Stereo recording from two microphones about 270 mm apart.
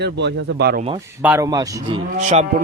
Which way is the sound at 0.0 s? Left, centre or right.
Right.